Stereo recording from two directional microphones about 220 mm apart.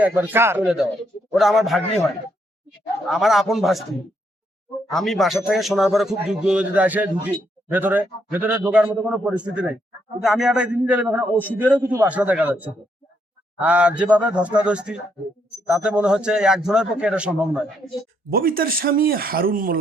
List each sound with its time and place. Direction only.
0.0 s a man's voice: 10° right (ahead or behind)
3.1 s speech: centre (ahead or behind)
4.9 s a man's voice: centre (ahead or behind)
18.3 s speech: 40° right (ahead or behind)